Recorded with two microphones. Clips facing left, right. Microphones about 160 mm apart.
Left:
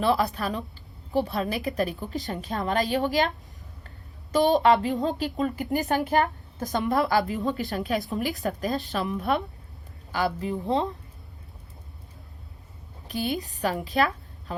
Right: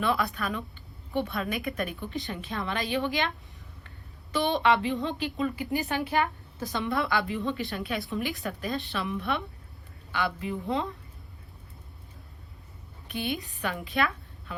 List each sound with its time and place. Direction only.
0.0 s a woman's voice: 35° left (ahead or behind)
13.1 s a woman's voice: 40° left (ahead or behind)